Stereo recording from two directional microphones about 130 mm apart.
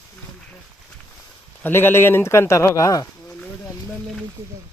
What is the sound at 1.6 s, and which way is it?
Speech, 15° left (ahead or behind).